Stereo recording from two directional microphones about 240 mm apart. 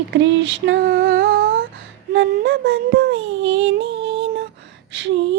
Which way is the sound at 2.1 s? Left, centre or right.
Right.